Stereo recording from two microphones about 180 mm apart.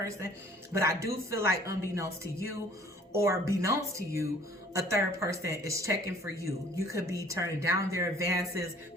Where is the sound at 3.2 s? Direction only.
15° right (ahead or behind).